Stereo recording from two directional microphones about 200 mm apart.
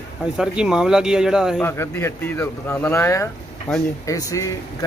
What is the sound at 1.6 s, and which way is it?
Speech, 10° left (ahead or behind).